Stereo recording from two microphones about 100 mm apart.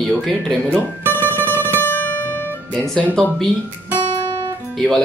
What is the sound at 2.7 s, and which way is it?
Speech, 10° left (ahead or behind).